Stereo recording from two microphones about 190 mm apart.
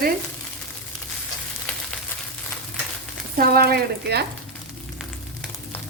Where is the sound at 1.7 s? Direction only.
5° left (ahead or behind).